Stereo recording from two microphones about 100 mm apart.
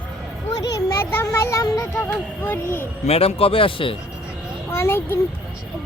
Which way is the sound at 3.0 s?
85° left.